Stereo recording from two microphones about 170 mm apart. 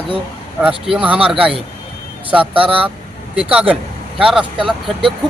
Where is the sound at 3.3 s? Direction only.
5° right (ahead or behind).